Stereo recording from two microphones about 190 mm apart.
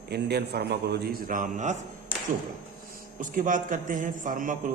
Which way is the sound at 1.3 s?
40° right (ahead or behind).